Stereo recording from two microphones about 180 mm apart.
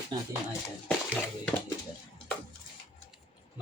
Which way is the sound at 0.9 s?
5° left (ahead or behind).